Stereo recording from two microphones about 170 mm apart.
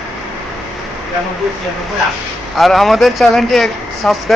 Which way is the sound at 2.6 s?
Centre (ahead or behind).